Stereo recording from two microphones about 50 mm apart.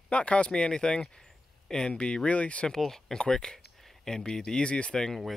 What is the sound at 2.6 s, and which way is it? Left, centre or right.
Speech, centre.